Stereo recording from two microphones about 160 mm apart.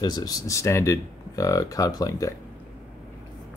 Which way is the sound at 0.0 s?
20° left (ahead or behind).